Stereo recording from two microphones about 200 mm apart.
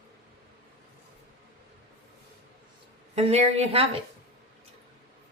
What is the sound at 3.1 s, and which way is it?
Speech, 30° right (ahead or behind).